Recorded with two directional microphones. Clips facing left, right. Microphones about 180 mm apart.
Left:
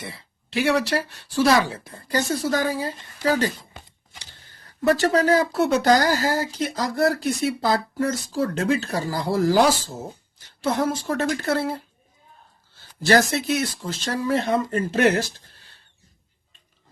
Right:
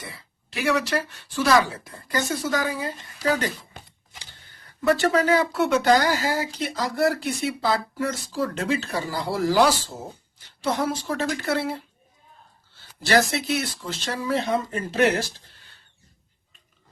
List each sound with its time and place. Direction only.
0.0 s speech: 30° left (ahead or behind)
10.6 s speech: 50° left (ahead or behind)
13.1 s speech: 45° left (ahead or behind)